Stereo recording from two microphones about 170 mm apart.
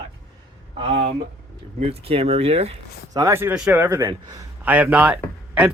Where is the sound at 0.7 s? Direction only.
30° right (ahead or behind).